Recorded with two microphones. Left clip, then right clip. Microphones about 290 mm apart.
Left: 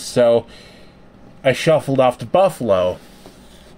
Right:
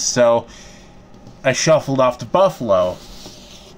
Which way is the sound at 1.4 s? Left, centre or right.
Centre.